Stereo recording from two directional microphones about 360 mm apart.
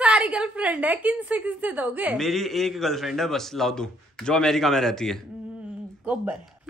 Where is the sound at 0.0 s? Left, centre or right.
Centre.